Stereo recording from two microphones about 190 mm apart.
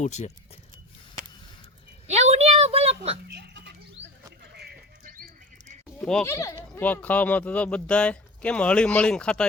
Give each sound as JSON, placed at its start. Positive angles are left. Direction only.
{"t": 0.0, "sound": "speech", "side_deg": 35}
{"t": 2.0, "sound": "a sound", "side_deg": -35}
{"t": 3.2, "sound": "a sound", "side_deg": -60}
{"t": 4.5, "sound": "bird", "side_deg": -60}
{"t": 6.0, "sound": "speech", "side_deg": 5}
{"t": 6.2, "sound": "speech", "side_deg": 15}